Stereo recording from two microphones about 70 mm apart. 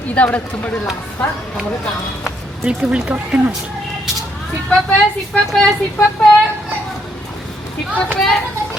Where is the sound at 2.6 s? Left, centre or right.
Centre.